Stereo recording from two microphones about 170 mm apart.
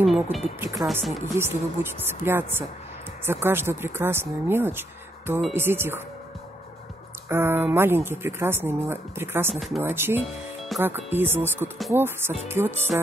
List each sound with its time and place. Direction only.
0.0 s speech: centre (ahead or behind)
0.6 s speech: 20° right (ahead or behind)
7.2 s speech: 15° right (ahead or behind)
9.5 s speech: centre (ahead or behind)
9.9 s speech: 15° right (ahead or behind)
10.7 s speech: centre (ahead or behind)
11.1 s speech: 15° right (ahead or behind)